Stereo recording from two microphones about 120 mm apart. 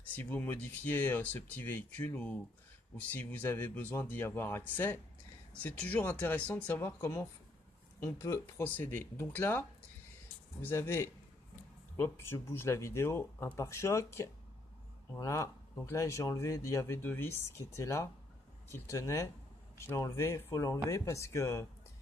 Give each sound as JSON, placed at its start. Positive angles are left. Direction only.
{"t": 0.1, "sound": "speech", "side_deg": 15}
{"t": 8.6, "sound": "speech", "side_deg": 15}